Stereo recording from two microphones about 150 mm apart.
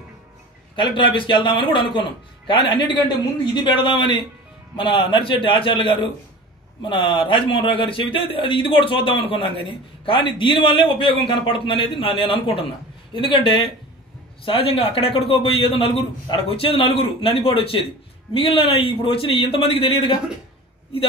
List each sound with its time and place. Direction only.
0.7 s a man's voice: 35° left (ahead or behind)